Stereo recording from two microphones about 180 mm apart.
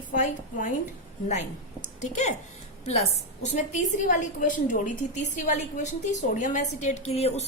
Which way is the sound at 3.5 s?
40° left (ahead or behind).